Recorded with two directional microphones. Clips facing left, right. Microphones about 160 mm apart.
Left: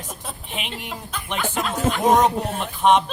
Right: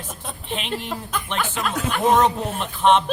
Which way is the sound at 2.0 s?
15° left (ahead or behind).